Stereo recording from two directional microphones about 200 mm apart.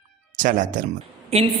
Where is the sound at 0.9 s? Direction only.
30° right (ahead or behind).